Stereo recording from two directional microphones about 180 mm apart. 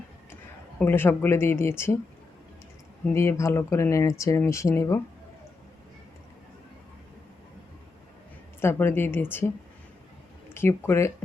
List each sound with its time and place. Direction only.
0.8 s speech: 10° left (ahead or behind)
3.2 s speech: 15° left (ahead or behind)
8.6 s speech: 10° left (ahead or behind)
10.5 s speech: 15° left (ahead or behind)